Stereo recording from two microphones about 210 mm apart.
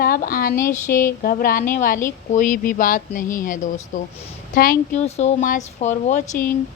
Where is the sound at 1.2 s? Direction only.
40° left (ahead or behind).